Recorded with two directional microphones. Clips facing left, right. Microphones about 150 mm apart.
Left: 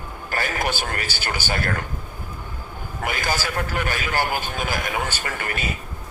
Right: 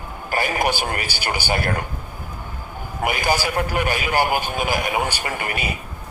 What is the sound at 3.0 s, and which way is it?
Speech, 15° right (ahead or behind).